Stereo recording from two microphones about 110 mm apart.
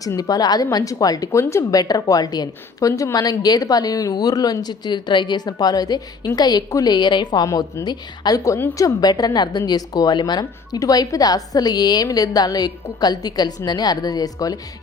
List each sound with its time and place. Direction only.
0.0 s a woman's voice: 35° left (ahead or behind)
8.5 s a woman's voice: 20° left (ahead or behind)
9.0 s a woman's voice: 35° left (ahead or behind)